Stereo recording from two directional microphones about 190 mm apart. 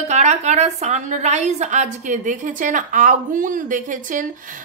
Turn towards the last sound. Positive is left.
turn(degrees=-45)  # may be behind; listen again after turning